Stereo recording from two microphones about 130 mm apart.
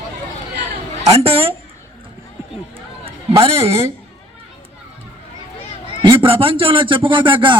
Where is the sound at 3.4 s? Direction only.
50° right (ahead or behind).